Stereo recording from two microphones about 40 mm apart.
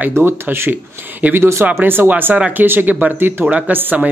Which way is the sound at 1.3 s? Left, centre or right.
Right.